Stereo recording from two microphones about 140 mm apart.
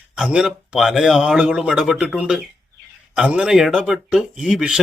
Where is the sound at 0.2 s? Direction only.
5° right (ahead or behind).